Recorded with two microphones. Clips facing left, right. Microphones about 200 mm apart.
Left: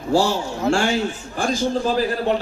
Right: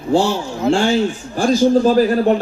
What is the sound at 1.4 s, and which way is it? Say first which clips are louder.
A man's voice: right 8 dB; 40° right (ahead or behind).